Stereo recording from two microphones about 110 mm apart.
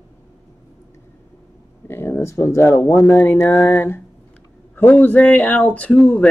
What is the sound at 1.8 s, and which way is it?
Speech, 20° left (ahead or behind).